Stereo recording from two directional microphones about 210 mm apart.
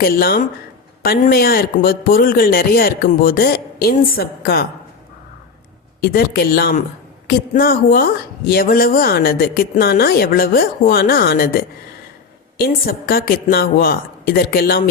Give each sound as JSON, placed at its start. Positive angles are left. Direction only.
{"t": 0.0, "sound": "speech", "side_deg": 45}
{"t": 6.0, "sound": "speech", "side_deg": 45}